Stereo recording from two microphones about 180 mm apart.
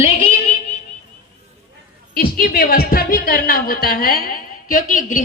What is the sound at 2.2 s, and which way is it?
A woman's voice, 55° left (ahead or behind).